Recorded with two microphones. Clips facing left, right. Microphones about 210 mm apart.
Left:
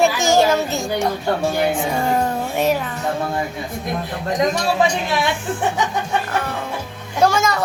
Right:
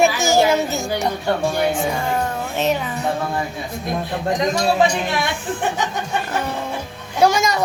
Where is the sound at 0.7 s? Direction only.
Centre (ahead or behind).